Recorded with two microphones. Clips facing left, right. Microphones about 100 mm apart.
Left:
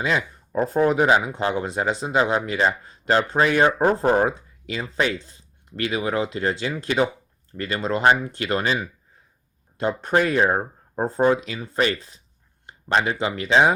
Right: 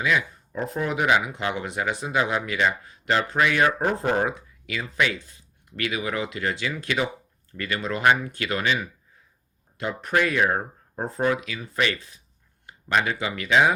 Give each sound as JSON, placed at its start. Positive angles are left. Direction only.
{"t": 0.0, "sound": "speech", "side_deg": 30}